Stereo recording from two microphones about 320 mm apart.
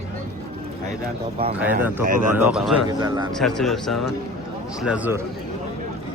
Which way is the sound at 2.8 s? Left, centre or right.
Centre.